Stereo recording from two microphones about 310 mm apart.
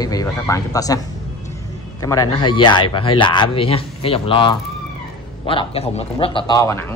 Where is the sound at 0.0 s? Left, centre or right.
Centre.